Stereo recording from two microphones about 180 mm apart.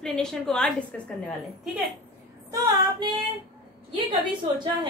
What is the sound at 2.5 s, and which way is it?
Female singing, 25° right (ahead or behind).